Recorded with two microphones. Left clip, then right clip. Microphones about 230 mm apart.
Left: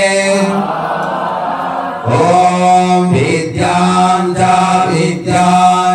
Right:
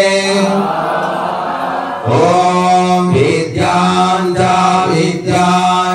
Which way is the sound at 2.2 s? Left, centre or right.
Left.